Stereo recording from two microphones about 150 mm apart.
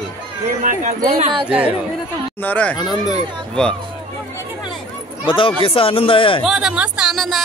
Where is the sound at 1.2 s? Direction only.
35° right (ahead or behind).